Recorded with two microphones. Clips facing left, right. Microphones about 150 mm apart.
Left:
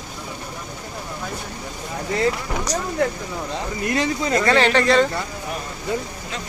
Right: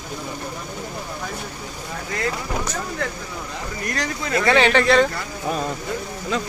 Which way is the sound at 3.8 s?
20° left (ahead or behind).